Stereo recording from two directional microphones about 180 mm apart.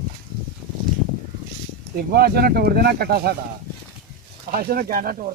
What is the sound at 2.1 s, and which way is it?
Speech, 55° right (ahead or behind).